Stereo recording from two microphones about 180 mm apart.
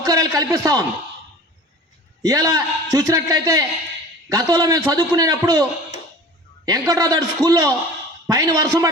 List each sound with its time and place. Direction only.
0.0 s a man's voice: 20° right (ahead or behind)
2.2 s a man's voice: 20° right (ahead or behind)
6.7 s a man's voice: 20° right (ahead or behind)